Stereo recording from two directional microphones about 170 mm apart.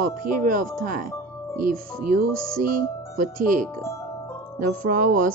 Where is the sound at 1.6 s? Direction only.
55° right (ahead or behind).